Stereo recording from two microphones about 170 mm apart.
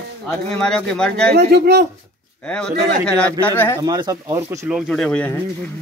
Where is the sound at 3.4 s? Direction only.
10° left (ahead or behind).